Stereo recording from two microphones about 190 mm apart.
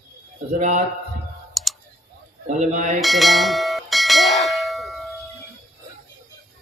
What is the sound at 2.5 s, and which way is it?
Speech, 40° right (ahead or behind).